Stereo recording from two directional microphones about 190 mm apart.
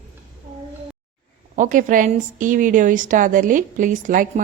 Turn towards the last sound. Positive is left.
turn(degrees=-45)  # may be behind; listen again after turning